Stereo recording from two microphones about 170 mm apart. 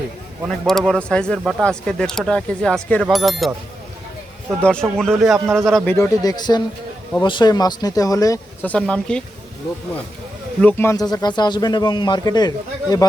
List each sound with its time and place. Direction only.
0.4 s speech: centre (ahead or behind)
4.6 s speech: 5° left (ahead or behind)
6.2 s speech: 25° left (ahead or behind)
8.6 s speech: 5° left (ahead or behind)
10.6 s speech: 10° left (ahead or behind)